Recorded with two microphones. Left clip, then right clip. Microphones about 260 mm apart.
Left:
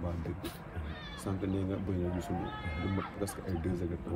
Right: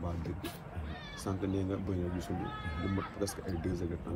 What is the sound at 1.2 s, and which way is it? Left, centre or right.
Speech, centre.